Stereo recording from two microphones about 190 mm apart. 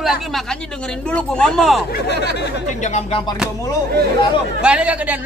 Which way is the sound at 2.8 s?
35° left (ahead or behind).